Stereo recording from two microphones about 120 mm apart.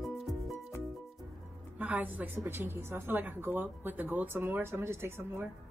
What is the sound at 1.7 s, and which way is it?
A woman's voice, 15° right (ahead or behind).